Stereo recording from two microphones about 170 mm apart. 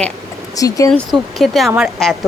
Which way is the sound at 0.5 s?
20° left (ahead or behind).